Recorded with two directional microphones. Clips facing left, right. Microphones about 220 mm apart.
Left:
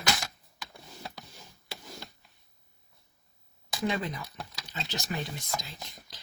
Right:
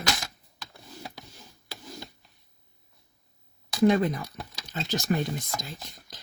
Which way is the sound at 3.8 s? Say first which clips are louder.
Right 10 dB; 50° right (ahead or behind).